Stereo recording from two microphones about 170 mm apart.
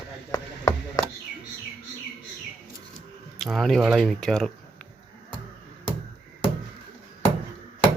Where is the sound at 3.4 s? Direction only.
Centre (ahead or behind).